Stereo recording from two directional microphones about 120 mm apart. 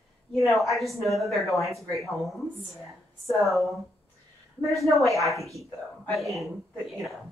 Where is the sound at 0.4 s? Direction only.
Centre (ahead or behind).